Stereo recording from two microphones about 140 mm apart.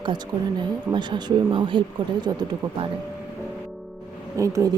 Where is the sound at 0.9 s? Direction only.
35° right (ahead or behind).